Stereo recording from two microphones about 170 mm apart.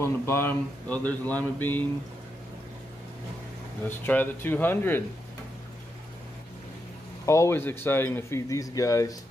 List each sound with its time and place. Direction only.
0.0 s speech: 15° left (ahead or behind)
3.8 s speech: 10° left (ahead or behind)
7.2 s speech: 15° left (ahead or behind)